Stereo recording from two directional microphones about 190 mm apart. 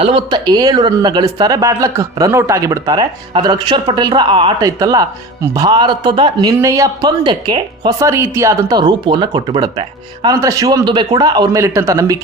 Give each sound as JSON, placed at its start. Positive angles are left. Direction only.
{"t": 0.0, "sound": "a man's voice", "side_deg": -30}